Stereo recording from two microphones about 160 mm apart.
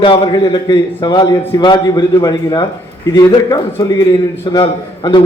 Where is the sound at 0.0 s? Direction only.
30° left (ahead or behind).